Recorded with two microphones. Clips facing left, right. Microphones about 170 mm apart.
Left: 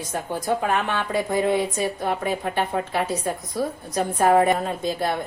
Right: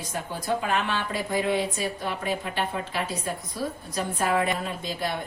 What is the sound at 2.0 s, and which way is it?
Speech, 50° left (ahead or behind).